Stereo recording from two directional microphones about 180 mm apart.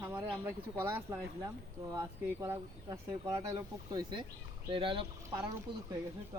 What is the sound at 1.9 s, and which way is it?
Speech, 15° right (ahead or behind).